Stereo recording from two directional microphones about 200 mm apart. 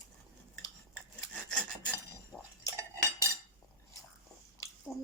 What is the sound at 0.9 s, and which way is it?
Rub, 5° left (ahead or behind).